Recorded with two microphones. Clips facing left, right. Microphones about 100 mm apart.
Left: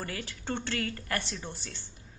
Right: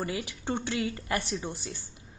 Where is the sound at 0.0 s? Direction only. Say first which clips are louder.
Right 5 dB; 15° right (ahead or behind).